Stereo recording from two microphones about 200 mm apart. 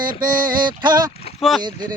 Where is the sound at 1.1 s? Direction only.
30° left (ahead or behind).